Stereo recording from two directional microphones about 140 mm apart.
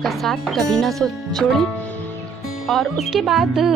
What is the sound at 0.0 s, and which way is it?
Speech, centre (ahead or behind).